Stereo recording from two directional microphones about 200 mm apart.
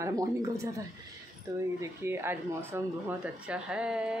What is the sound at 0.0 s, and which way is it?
Speech, 15° right (ahead or behind).